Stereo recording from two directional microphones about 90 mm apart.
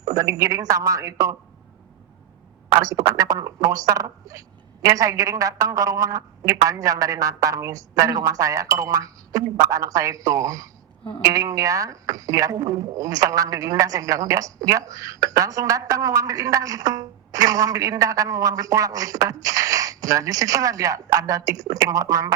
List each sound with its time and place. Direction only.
0.0 s speech: 40° right (ahead or behind)
3.2 s speech: 40° right (ahead or behind)